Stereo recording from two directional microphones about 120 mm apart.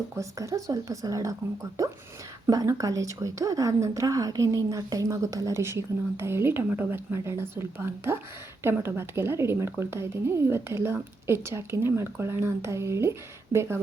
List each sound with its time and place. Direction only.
0.2 s a woman's voice: 25° right (ahead or behind)